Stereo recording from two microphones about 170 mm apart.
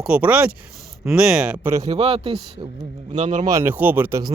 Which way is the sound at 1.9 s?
35° right (ahead or behind).